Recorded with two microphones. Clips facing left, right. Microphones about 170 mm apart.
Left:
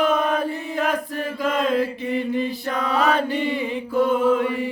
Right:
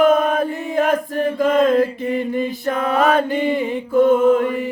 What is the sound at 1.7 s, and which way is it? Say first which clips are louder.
Mantra: right 5 dB; 45° right (ahead or behind).